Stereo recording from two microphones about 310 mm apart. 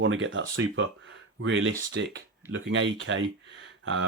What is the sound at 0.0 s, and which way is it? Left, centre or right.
Speech, right.